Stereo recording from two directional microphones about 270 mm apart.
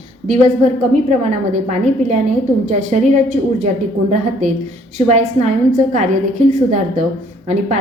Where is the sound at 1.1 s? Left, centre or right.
Right.